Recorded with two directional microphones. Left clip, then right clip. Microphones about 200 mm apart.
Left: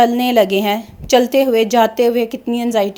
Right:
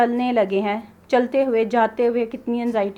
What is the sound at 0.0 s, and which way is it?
A woman's voice, 55° left (ahead or behind).